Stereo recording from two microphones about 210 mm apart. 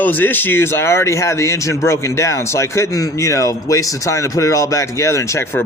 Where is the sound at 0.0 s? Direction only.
10° left (ahead or behind).